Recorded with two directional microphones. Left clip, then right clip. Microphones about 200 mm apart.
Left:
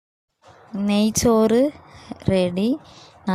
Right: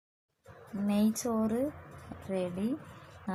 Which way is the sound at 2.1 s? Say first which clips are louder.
Left 12 dB; 50° left (ahead or behind).